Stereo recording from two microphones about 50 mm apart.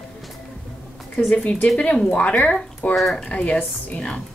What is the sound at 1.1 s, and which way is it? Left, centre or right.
Speech, left.